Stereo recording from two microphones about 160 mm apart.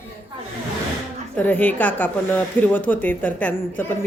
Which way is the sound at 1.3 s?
10° left (ahead or behind).